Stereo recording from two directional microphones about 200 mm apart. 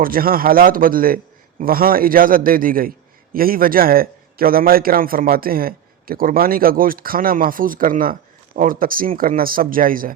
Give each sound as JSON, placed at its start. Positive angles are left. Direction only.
{"t": 0.0, "sound": "a man's voice", "side_deg": -45}